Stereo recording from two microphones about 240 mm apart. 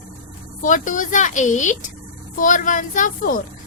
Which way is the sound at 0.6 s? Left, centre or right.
Left.